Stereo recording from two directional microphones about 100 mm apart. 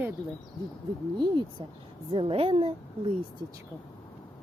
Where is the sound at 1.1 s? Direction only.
55° right (ahead or behind).